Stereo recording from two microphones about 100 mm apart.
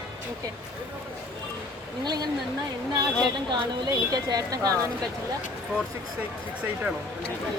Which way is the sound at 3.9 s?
40° right (ahead or behind).